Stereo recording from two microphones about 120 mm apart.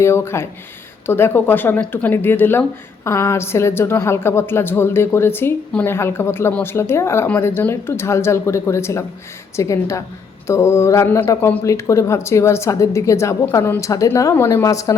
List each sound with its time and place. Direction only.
0.0 s speech: 20° left (ahead or behind)